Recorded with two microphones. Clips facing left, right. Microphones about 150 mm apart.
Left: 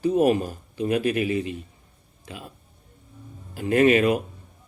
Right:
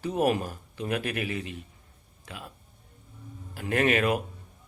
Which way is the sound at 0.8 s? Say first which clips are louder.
Left 7 dB; 55° right (ahead or behind).